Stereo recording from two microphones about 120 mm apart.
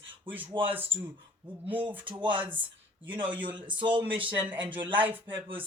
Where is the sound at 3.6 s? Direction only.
45° right (ahead or behind).